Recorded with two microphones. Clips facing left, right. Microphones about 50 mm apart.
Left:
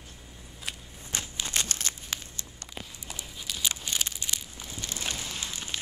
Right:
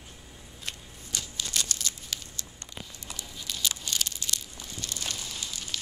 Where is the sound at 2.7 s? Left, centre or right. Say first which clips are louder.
Left 1 dB; centre.